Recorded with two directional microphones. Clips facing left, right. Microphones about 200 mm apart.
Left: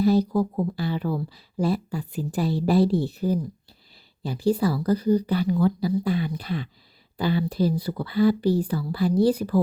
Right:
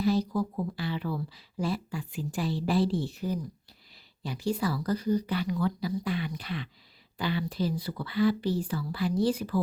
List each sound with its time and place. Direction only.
0.0 s speech: 40° left (ahead or behind)